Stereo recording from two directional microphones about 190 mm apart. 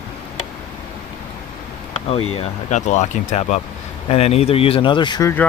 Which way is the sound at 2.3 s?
35° left (ahead or behind).